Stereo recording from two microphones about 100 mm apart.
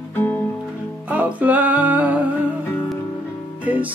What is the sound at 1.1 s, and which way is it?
Music, 15° right (ahead or behind).